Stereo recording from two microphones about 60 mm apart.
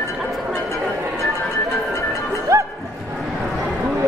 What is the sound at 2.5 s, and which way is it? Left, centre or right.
Music, right.